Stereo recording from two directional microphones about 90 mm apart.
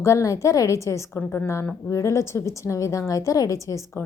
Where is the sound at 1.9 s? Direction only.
30° left (ahead or behind).